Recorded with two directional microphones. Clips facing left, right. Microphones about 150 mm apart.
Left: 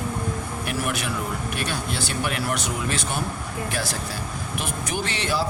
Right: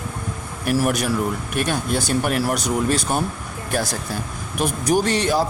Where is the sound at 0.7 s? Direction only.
45° right (ahead or behind).